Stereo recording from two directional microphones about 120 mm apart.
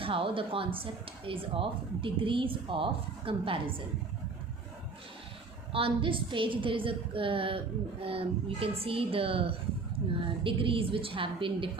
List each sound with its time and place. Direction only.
0.0 s speech: 50° right (ahead or behind)
5.7 s speech: 45° right (ahead or behind)